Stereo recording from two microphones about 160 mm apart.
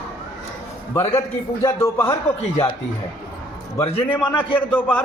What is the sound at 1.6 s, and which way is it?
Speech, 20° left (ahead or behind).